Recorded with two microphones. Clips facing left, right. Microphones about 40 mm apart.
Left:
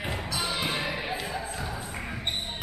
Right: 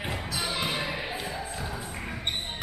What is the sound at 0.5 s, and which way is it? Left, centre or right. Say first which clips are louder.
Music: even; centre.